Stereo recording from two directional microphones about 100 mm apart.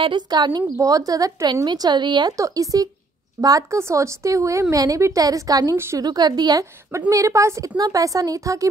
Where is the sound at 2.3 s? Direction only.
35° right (ahead or behind).